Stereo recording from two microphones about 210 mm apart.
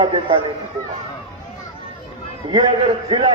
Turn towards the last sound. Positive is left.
turn(degrees=-25)  # may be behind; listen again after turning